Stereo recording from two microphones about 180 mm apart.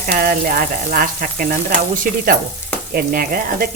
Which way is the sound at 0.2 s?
50° right (ahead or behind).